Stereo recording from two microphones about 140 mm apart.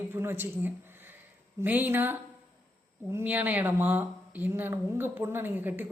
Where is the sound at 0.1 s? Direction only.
15° right (ahead or behind).